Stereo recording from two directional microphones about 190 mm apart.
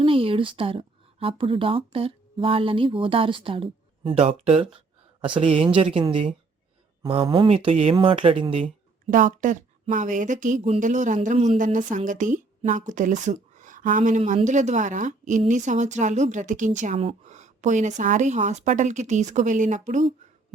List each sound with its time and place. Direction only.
0.0 s speech: 30° right (ahead or behind)
9.0 s speech: 45° right (ahead or behind)